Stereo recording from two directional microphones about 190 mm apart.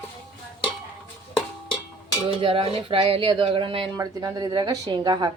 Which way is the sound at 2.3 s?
30° right (ahead or behind).